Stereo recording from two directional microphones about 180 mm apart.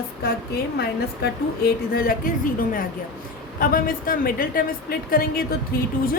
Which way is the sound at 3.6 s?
50° left (ahead or behind).